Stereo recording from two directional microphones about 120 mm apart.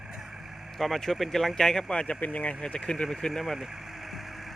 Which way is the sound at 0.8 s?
Centre (ahead or behind).